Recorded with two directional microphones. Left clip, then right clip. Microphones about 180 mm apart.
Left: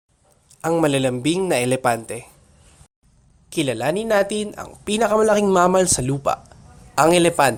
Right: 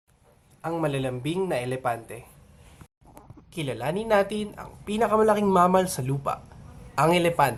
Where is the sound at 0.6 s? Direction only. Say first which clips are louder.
Left 9 dB; 50° left (ahead or behind).